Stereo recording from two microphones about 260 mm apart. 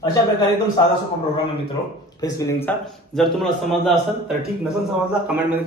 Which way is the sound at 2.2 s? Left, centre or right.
Centre.